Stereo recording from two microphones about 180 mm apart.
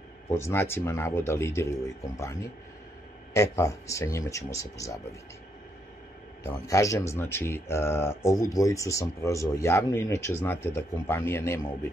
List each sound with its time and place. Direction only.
0.3 s speech: 15° left (ahead or behind)
3.3 s speech: 15° left (ahead or behind)
6.4 s speech: 15° left (ahead or behind)